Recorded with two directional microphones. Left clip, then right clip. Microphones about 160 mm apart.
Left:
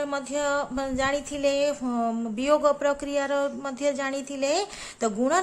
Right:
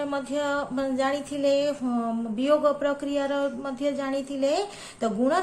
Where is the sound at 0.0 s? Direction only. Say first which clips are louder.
Even; 45° left (ahead or behind).